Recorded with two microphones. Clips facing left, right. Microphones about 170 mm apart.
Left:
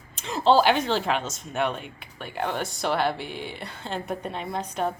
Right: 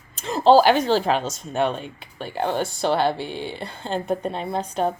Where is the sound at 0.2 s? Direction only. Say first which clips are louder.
Right 5 dB; 40° right (ahead or behind).